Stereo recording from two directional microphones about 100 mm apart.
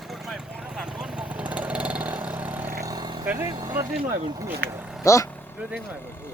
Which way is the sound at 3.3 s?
25° right (ahead or behind).